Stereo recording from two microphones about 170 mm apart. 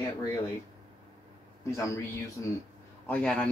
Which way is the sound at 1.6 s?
15° left (ahead or behind).